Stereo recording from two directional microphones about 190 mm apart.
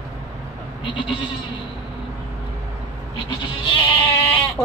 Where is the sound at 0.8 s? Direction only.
25° left (ahead or behind).